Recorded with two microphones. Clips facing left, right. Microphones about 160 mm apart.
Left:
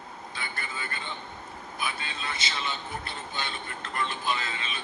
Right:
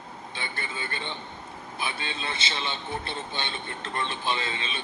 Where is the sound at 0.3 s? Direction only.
25° right (ahead or behind).